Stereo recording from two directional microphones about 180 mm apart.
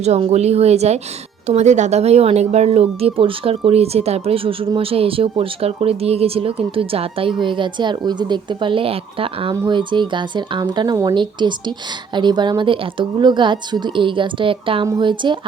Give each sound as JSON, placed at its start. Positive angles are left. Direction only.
{"t": 0.0, "sound": "a woman's voice", "side_deg": -35}